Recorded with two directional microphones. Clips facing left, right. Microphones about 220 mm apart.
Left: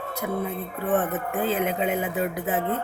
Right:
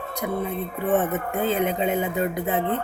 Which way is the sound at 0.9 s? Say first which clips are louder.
Right 1 dB; centre (ahead or behind).